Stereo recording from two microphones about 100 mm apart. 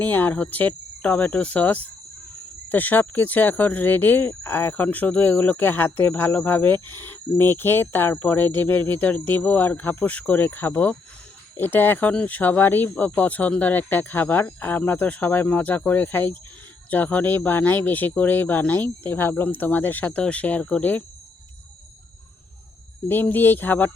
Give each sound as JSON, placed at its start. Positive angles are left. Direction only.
{"t": 0.0, "sound": "speech", "side_deg": 20}
{"t": 23.0, "sound": "speech", "side_deg": 20}